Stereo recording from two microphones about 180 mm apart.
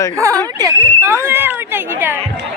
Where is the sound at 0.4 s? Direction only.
20° right (ahead or behind).